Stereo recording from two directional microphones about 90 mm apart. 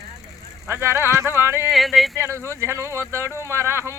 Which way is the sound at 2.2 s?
30° right (ahead or behind).